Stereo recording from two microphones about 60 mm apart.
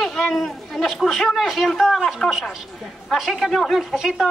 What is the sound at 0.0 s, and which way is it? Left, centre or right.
A man's voice, centre.